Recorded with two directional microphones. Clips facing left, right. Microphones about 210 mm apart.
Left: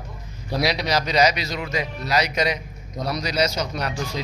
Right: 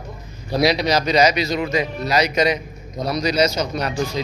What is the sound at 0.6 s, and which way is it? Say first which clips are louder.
A man's voice: right 5 dB; 5° left (ahead or behind).